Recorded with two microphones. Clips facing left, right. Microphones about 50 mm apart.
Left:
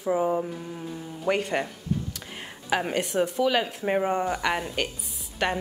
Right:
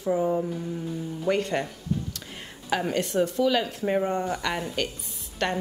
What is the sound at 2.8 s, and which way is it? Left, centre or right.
Speech, centre.